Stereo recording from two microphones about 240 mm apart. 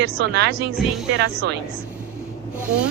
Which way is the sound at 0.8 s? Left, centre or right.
Centre.